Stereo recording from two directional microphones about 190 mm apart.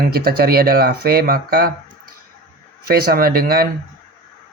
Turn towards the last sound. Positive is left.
turn(degrees=-50)  # may be behind; listen again after turning